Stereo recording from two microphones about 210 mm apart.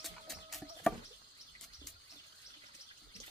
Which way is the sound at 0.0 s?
Centre (ahead or behind).